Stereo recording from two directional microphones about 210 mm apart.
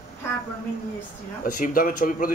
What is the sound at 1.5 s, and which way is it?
Speech, 40° left (ahead or behind).